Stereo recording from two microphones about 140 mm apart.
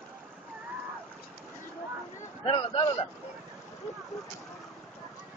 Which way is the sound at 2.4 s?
35° left (ahead or behind).